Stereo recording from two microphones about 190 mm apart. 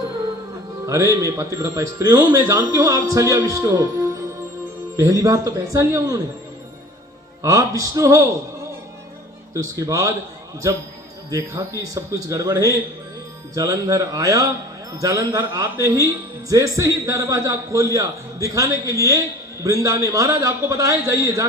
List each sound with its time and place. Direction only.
0.9 s speech: 15° right (ahead or behind)
4.9 s speech: 15° right (ahead or behind)
7.4 s speech: 15° right (ahead or behind)
9.6 s speech: 15° right (ahead or behind)
11.3 s speech: 15° right (ahead or behind)